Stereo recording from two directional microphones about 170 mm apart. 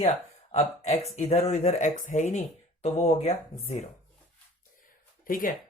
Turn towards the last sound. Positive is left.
turn(degrees=55)  # may be behind; listen again after turning